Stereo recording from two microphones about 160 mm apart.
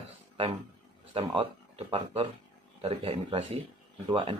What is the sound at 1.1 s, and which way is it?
Speech, 35° right (ahead or behind).